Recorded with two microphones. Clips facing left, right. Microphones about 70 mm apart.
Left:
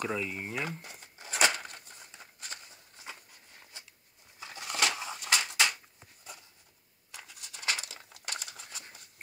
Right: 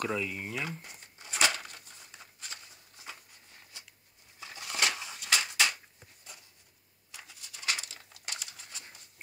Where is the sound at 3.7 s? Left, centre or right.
Left.